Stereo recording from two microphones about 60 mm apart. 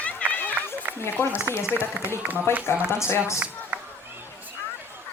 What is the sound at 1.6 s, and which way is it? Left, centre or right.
Speech, right.